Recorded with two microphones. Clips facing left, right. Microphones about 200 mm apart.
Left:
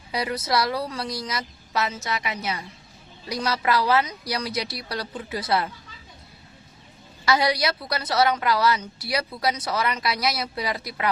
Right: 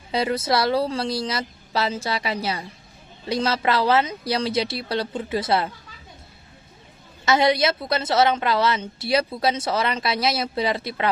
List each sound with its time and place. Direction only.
0.1 s a woman's voice: 25° right (ahead or behind)
7.3 s a woman's voice: 25° right (ahead or behind)